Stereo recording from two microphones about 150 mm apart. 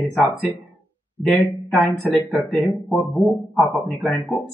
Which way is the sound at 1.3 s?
Centre (ahead or behind).